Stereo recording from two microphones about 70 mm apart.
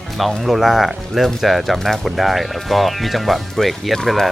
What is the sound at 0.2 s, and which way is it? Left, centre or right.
Speech, centre.